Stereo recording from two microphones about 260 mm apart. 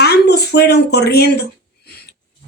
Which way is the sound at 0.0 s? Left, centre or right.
Left.